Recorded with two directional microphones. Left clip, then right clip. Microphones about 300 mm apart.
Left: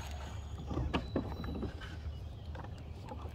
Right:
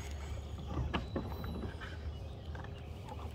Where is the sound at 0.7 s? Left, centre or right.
Left.